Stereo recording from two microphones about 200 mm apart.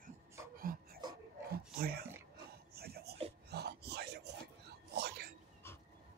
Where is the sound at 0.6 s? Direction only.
45° right (ahead or behind).